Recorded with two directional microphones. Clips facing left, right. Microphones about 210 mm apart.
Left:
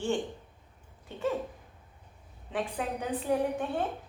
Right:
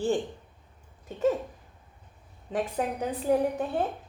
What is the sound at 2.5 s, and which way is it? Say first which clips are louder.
A woman's voice: right 4 dB; 40° right (ahead or behind).